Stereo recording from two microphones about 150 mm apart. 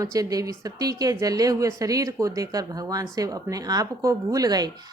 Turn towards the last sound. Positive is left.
turn(degrees=-25)  # may be behind; listen again after turning